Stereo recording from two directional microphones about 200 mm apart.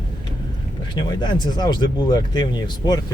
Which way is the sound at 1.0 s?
20° left (ahead or behind).